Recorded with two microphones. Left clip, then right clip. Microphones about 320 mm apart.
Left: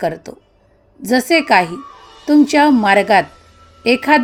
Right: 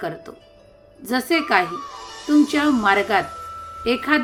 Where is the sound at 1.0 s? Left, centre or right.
Left.